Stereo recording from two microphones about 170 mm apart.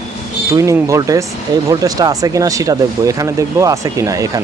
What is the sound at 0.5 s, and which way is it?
Speech, 20° right (ahead or behind).